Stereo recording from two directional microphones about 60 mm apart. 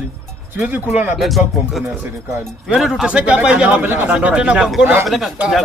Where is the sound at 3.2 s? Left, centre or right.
Right.